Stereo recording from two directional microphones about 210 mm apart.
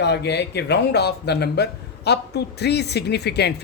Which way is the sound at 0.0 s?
55° left (ahead or behind).